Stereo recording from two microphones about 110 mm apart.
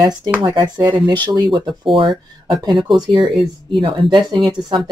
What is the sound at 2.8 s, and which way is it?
Speech, 5° right (ahead or behind).